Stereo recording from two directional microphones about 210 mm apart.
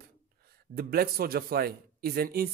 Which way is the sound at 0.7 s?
45° right (ahead or behind).